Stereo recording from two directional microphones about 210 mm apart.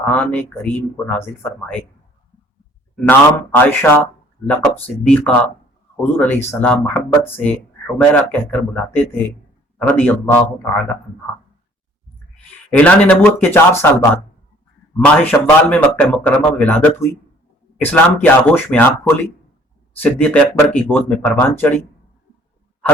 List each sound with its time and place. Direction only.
0.0 s a man's voice: 5° left (ahead or behind)
2.9 s a man's voice: 10° left (ahead or behind)
5.0 s a man's voice: 5° left (ahead or behind)
12.7 s a man's voice: 5° left (ahead or behind)